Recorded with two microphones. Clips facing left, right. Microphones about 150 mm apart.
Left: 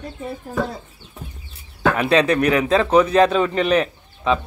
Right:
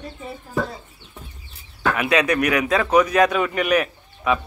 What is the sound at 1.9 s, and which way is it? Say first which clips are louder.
A man's voice: left 2 dB; 30° left (ahead or behind).